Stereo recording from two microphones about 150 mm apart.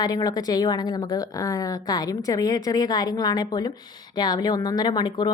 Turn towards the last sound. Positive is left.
turn(degrees=30)  # may be behind; listen again after turning